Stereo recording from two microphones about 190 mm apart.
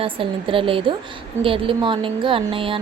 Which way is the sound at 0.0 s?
30° right (ahead or behind).